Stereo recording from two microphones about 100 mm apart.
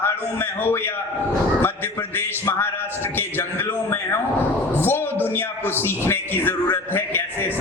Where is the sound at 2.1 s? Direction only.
20° left (ahead or behind).